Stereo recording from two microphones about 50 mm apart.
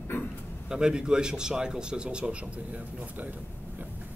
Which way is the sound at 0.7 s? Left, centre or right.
Centre.